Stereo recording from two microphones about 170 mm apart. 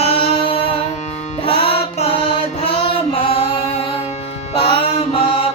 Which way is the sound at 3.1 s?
35° left (ahead or behind).